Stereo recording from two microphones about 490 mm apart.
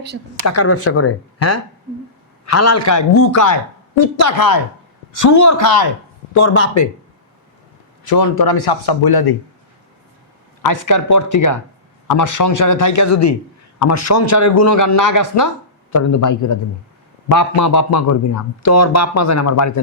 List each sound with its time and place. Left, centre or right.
0.4 s speech: left
6.3 s speech: left
8.0 s speech: left
10.6 s speech: left